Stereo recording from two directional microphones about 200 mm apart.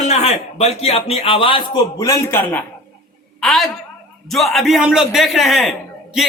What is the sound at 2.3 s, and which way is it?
A man's voice, 10° left (ahead or behind).